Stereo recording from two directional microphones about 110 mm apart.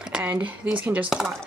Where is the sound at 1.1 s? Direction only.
5° right (ahead or behind).